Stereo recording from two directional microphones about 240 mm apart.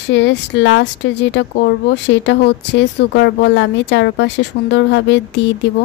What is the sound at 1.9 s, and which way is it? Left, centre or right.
A woman's voice, left.